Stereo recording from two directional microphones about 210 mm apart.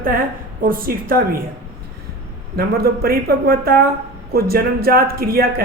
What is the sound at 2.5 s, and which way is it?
Speech, 45° right (ahead or behind).